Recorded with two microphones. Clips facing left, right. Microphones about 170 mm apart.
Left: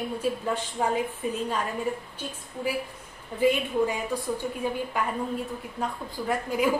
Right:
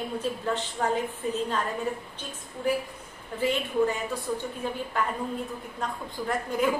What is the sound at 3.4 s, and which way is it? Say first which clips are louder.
A woman's voice: left 2 dB; 10° left (ahead or behind).